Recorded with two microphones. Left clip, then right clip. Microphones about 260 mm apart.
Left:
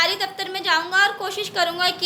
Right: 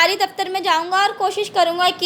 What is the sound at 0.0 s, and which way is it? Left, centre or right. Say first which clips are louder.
A woman's voice: right 5 dB; right.